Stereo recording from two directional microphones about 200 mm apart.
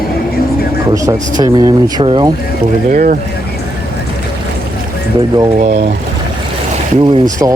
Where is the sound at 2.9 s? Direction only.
45° right (ahead or behind).